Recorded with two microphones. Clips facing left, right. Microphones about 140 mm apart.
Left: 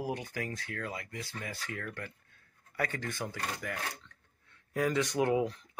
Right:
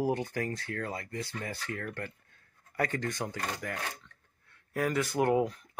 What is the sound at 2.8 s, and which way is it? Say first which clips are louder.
Speech: right 4 dB; 50° right (ahead or behind).